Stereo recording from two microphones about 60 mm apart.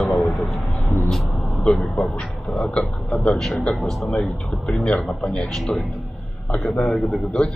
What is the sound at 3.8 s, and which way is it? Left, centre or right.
A man's voice, centre.